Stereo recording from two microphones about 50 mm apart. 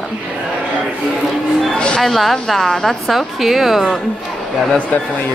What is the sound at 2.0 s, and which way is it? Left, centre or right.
A woman's voice, centre.